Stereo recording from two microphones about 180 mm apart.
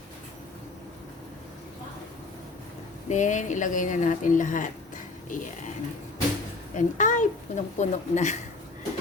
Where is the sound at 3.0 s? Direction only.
45° left (ahead or behind).